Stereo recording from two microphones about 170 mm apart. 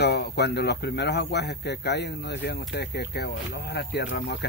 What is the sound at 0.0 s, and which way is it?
Speech, 75° left (ahead or behind).